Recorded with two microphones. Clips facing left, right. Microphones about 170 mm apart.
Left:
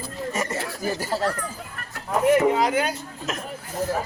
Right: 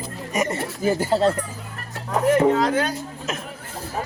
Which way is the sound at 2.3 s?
10° left (ahead or behind).